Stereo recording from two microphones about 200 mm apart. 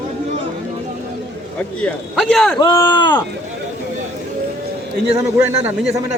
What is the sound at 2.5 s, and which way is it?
Speech, 20° left (ahead or behind).